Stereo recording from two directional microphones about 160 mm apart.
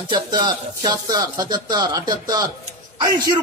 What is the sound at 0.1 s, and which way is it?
Speech, 25° right (ahead or behind).